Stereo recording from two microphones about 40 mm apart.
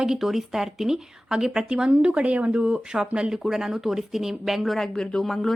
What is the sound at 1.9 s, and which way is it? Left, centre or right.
Speech, right.